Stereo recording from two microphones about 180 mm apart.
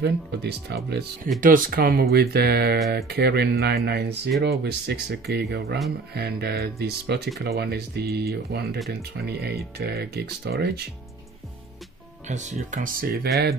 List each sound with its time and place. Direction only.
0.0 s speech: 70° right (ahead or behind)
1.4 s speech: 50° right (ahead or behind)
12.3 s speech: 40° right (ahead or behind); by 13.3 s 55° right (ahead or behind)